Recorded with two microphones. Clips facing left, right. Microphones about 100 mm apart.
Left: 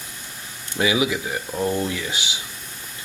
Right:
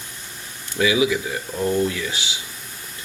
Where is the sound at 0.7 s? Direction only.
25° left (ahead or behind).